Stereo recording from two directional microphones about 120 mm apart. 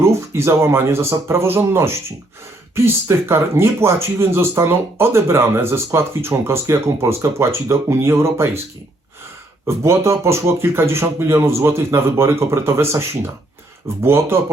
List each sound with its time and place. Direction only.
0.0 s speech: 25° right (ahead or behind)
9.6 s speech: 25° right (ahead or behind)